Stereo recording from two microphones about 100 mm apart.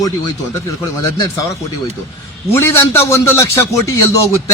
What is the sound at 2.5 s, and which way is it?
A man's voice, 25° left (ahead or behind).